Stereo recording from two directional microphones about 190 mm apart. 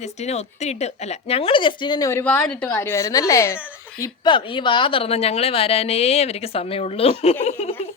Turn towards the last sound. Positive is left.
turn(degrees=30)  # may be behind; listen again after turning